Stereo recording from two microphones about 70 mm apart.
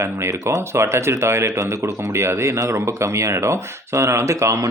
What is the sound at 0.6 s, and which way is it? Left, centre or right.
Speech, right.